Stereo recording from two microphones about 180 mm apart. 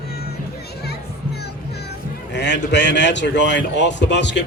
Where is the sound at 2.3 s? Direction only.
75° left (ahead or behind).